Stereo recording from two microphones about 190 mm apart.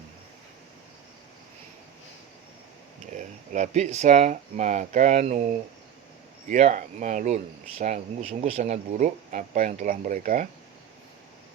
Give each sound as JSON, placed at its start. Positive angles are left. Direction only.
{"t": 3.2, "sound": "speech", "side_deg": -40}
{"t": 6.5, "sound": "speech", "side_deg": -40}